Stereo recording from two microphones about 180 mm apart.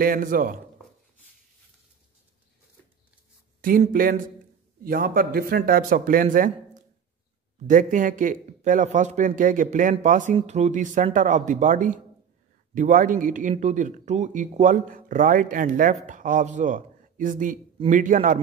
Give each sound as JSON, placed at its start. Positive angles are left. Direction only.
{"t": 0.0, "sound": "speech", "side_deg": -50}
{"t": 3.6, "sound": "speech", "side_deg": -50}